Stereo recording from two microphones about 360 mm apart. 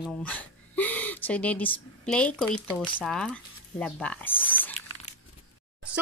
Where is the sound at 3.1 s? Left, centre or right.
Centre.